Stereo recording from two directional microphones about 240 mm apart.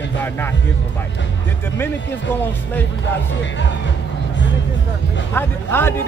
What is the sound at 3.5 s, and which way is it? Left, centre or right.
Speech, left.